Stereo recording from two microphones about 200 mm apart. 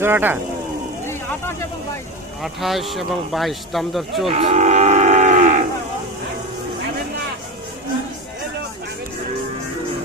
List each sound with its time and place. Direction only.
0.0 s speech: 10° right (ahead or behind)
1.0 s vehicle: 10° left (ahead or behind)
2.4 s speech: centre (ahead or behind)
4.3 s livestock: 30° right (ahead or behind)